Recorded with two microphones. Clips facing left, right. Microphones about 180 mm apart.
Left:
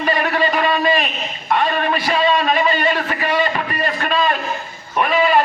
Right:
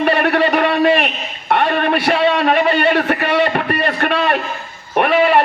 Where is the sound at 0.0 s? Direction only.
65° right (ahead or behind).